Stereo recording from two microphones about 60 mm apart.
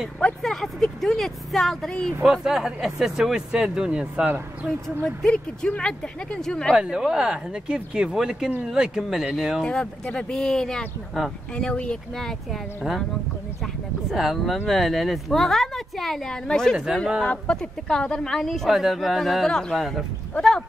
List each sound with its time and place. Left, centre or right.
0.4 s speech: centre
2.2 s speech: centre
5.7 s speech: centre
6.7 s speech: centre
9.7 s speech: centre
14.1 s speech: centre
16.7 s speech: centre
17.2 s speech: centre